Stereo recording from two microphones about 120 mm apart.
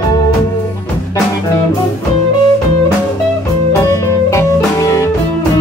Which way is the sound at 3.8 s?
25° left (ahead or behind).